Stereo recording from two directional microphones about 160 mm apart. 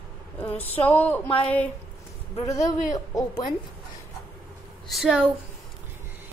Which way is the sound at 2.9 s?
25° left (ahead or behind).